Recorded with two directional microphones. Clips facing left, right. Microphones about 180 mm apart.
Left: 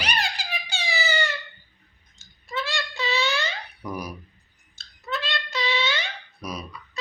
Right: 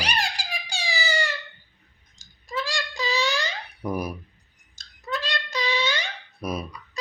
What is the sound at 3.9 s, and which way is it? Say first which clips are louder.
Speech: right 5 dB; 55° right (ahead or behind).